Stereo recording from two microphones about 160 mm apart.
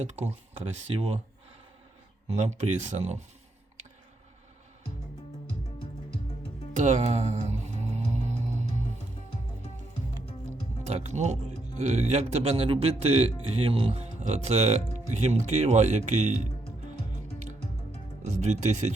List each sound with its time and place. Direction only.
0.0 s speech: 45° right (ahead or behind)
2.2 s speech: 45° right (ahead or behind)
6.7 s music: 45° right (ahead or behind)
10.8 s speech: 45° right (ahead or behind)